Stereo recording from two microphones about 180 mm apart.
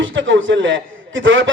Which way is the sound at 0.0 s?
90° right.